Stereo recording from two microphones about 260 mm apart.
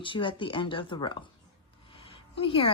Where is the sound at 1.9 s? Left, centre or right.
Left.